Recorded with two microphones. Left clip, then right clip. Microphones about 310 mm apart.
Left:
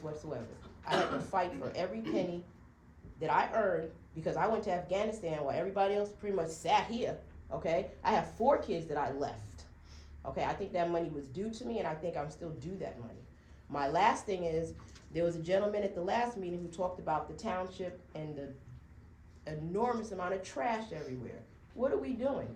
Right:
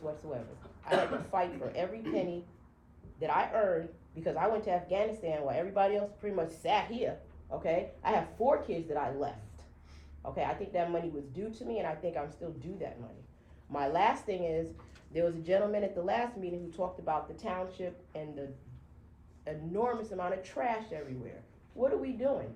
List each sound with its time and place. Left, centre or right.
0.3 s speech: left
19.5 s speech: left